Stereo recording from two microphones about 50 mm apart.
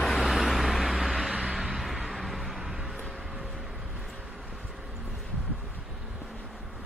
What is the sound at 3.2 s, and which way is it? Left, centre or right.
Vehicle, centre.